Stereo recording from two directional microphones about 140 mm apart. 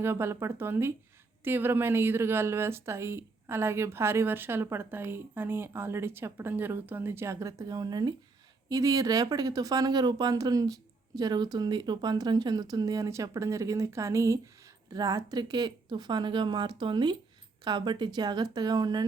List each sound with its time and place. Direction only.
0.0 s speech: 20° right (ahead or behind)